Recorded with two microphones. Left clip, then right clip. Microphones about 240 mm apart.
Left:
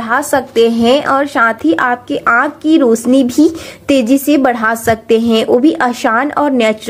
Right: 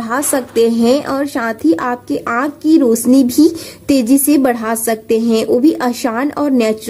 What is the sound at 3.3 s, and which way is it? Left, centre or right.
Speech, left.